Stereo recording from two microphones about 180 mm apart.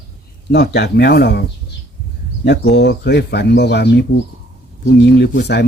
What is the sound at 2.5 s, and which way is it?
Speech, 70° left (ahead or behind).